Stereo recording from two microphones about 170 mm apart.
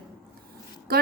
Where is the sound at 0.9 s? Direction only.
65° right (ahead or behind).